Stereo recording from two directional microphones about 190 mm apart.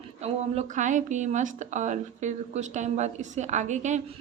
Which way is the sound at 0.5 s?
40° right (ahead or behind).